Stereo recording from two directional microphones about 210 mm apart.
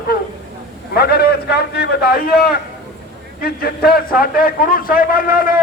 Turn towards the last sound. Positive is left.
turn(degrees=40)  # may be behind; listen again after turning